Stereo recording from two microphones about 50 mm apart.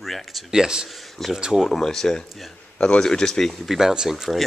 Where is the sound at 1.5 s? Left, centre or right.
Centre.